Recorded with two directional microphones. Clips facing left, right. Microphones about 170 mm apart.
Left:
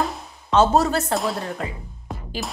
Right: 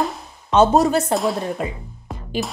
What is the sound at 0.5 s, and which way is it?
Speech, 15° right (ahead or behind).